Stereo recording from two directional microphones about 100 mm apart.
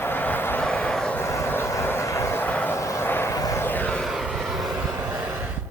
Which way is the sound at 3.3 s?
35° left (ahead or behind).